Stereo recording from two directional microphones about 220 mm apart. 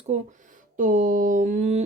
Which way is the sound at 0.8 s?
35° right (ahead or behind).